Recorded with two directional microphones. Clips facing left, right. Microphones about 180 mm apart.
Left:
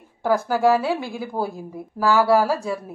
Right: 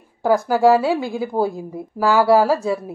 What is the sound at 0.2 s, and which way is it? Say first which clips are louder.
A woman's voice: right 4 dB; 15° right (ahead or behind).